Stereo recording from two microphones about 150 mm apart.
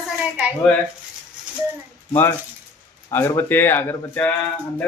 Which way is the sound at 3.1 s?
15° left (ahead or behind).